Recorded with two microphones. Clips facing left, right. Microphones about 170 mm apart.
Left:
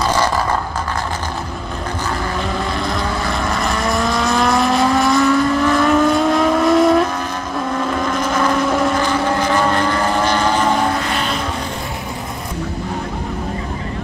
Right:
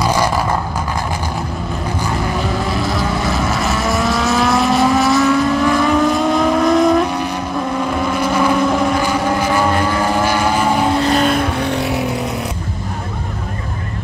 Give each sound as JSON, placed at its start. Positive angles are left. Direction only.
{"t": 0.0, "sound": "vehicle", "side_deg": -10}
{"t": 2.8, "sound": "vehicle", "side_deg": -5}
{"t": 8.0, "sound": "vehicle", "side_deg": -10}
{"t": 11.1, "sound": "vehicle", "side_deg": -40}